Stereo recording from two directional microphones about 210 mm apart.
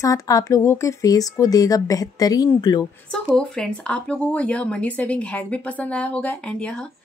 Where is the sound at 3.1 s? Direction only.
5° left (ahead or behind).